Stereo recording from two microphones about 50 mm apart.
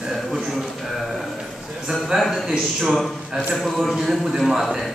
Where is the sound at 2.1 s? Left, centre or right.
Centre.